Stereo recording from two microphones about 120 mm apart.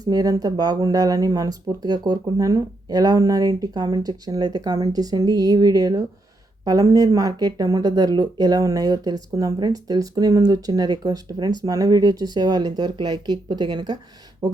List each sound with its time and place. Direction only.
0.0 s speech: 30° right (ahead or behind)